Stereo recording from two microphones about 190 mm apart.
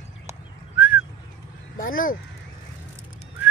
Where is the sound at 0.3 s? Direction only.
10° right (ahead or behind).